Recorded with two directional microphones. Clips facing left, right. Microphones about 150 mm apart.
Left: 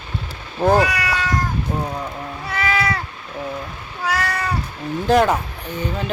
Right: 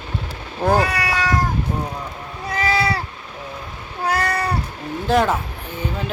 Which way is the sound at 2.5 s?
35° right (ahead or behind).